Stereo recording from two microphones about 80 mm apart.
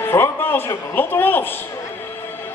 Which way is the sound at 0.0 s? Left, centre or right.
Left.